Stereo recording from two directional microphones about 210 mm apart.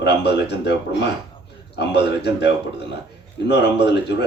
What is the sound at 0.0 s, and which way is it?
Speech, 55° left (ahead or behind).